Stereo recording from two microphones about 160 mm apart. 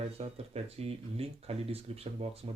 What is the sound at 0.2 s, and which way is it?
Speech, 40° right (ahead or behind).